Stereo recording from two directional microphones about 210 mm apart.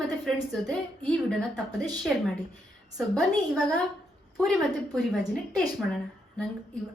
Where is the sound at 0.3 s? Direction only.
Centre (ahead or behind).